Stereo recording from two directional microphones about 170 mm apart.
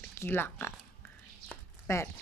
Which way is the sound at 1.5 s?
15° left (ahead or behind).